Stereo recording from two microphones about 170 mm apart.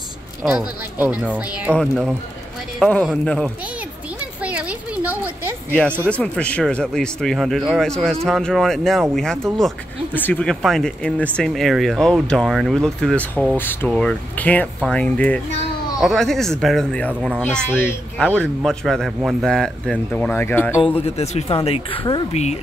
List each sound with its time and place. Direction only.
0.4 s speech: 5° right (ahead or behind)
1.8 s speech: 5° left (ahead or behind)
4.5 s a sound: 10° right (ahead or behind)
6.0 s speech: 5° left (ahead or behind)
17.4 s speech: 10° left (ahead or behind)
20.8 s speech: 35° left (ahead or behind)
22.3 s speech: 40° left (ahead or behind)